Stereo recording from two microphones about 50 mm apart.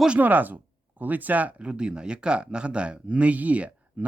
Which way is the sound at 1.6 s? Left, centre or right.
Centre.